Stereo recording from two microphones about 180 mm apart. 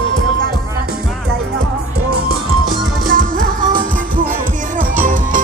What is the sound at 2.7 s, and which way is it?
Music, 50° right (ahead or behind).